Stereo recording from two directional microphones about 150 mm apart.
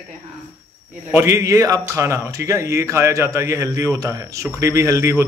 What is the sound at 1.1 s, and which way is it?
Speech, 15° right (ahead or behind).